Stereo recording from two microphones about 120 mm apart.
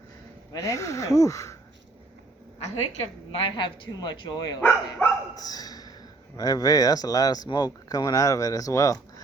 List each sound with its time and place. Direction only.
0.5 s speech: 25° left (ahead or behind)
3.3 s speech: 45° left (ahead or behind)
4.6 s speech: 10° left (ahead or behind)
5.3 s a sound: 35° left (ahead or behind)
6.3 s speech: 30° left (ahead or behind)